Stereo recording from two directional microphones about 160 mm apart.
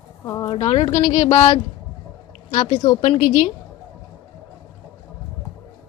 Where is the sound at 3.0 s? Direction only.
45° left (ahead or behind).